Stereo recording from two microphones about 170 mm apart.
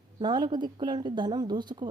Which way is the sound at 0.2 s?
25° right (ahead or behind).